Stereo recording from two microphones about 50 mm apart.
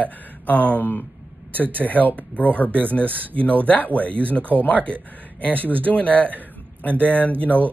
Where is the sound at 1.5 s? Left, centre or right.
Right.